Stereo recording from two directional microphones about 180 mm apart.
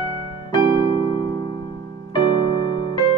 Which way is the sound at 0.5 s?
25° left (ahead or behind).